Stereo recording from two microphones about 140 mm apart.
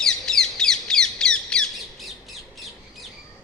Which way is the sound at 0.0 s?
5° left (ahead or behind).